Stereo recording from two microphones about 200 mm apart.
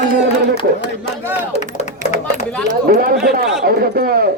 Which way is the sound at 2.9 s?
45° right (ahead or behind).